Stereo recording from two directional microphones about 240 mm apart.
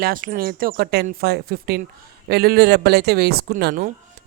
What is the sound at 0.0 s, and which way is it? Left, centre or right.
Speech, right.